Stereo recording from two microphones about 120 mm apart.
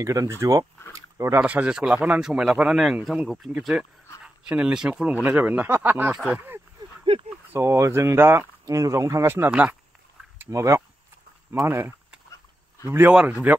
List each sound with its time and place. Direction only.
0.0 s speech: 25° right (ahead or behind)
0.9 s a sound: 25° right (ahead or behind)
1.4 s a man's voice: 10° right (ahead or behind)
10.4 s speech: 25° right (ahead or behind)
13.1 s speech: 10° right (ahead or behind)